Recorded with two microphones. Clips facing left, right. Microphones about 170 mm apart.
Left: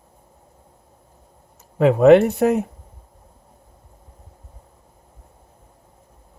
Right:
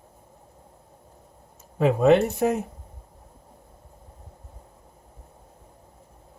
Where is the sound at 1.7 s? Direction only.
65° left (ahead or behind).